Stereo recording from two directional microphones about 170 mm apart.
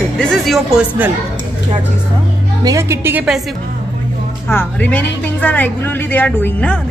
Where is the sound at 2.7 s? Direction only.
15° right (ahead or behind).